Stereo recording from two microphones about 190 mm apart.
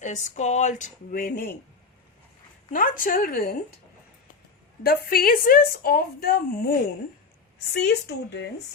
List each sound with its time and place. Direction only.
0.0 s speech: 40° left (ahead or behind)
2.7 s speech: 45° left (ahead or behind)
4.8 s speech: 50° left (ahead or behind)